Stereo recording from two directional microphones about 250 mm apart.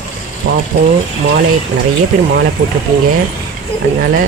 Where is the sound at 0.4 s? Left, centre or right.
Right.